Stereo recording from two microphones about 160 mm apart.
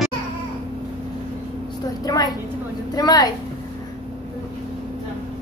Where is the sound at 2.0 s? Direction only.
25° left (ahead or behind).